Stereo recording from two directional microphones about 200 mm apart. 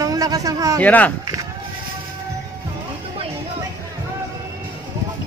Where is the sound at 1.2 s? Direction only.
15° right (ahead or behind).